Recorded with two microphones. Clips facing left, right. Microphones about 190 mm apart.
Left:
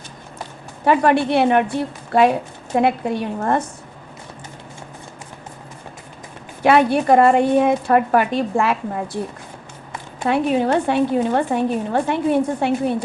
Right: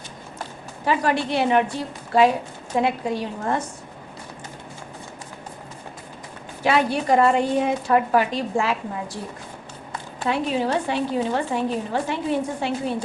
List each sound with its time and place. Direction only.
0.9 s a woman's voice: 60° left (ahead or behind)
6.6 s a woman's voice: 60° left (ahead or behind)
10.2 s a woman's voice: 55° left (ahead or behind)